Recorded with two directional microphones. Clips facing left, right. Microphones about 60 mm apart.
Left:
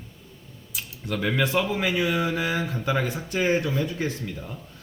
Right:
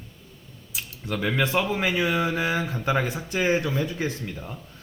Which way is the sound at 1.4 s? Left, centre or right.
Right.